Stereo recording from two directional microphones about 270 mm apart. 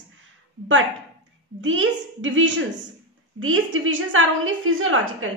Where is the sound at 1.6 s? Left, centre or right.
Right.